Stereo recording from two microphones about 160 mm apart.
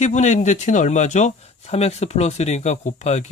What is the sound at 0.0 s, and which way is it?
Speech, 45° left (ahead or behind).